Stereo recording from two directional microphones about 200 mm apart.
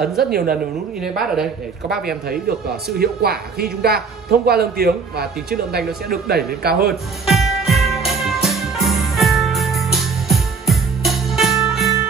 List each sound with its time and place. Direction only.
0.0 s speech: centre (ahead or behind)
2.9 s a woman's voice: 50° right (ahead or behind)
7.2 s music: centre (ahead or behind)